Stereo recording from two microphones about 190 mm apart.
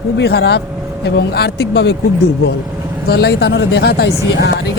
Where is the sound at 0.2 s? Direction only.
60° left (ahead or behind).